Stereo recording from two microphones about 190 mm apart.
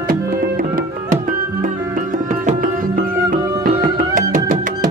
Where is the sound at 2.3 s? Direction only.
40° right (ahead or behind).